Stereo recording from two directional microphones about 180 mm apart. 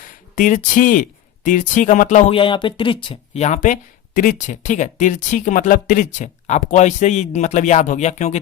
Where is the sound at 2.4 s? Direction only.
25° left (ahead or behind).